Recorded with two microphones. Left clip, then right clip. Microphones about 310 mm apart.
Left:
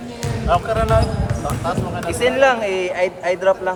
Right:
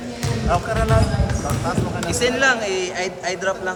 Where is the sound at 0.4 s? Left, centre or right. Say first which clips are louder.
Left 4 dB; centre.